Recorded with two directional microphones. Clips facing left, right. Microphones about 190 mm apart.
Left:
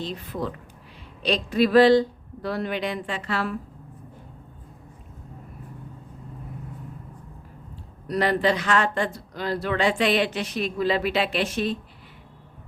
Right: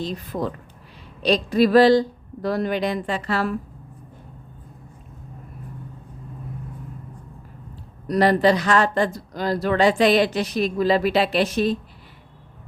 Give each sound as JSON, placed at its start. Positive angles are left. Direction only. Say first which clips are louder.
{"t": 0.0, "sound": "speech", "louder": "right 3 dB", "side_deg": -40}
{"t": 8.0, "sound": "speech", "louder": "right 5 dB", "side_deg": -40}